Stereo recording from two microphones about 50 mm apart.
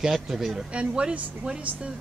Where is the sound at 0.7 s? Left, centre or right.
Centre.